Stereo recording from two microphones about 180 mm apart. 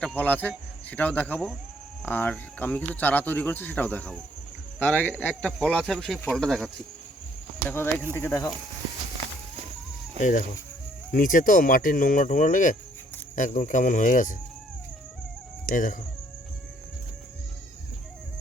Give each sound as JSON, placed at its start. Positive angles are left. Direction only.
{"t": 0.0, "sound": "speech", "side_deg": 5}
{"t": 7.7, "sound": "speech", "side_deg": 10}
{"t": 10.2, "sound": "speech", "side_deg": 45}
{"t": 15.6, "sound": "speech", "side_deg": 50}